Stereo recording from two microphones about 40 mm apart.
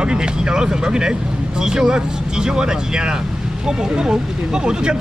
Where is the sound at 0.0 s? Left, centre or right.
Right.